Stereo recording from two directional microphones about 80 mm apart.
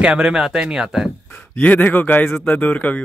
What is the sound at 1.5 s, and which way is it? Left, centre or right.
A man's voice, centre.